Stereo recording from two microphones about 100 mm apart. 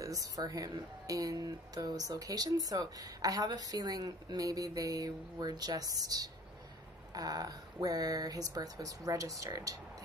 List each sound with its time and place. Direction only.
0.0 s speech: 35° right (ahead or behind)